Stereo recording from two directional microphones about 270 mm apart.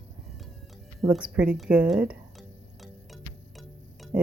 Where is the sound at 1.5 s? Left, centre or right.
Centre.